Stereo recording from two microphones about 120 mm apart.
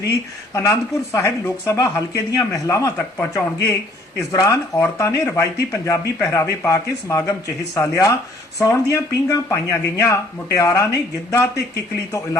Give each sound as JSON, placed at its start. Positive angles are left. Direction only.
{"t": 0.5, "sound": "speech", "side_deg": 25}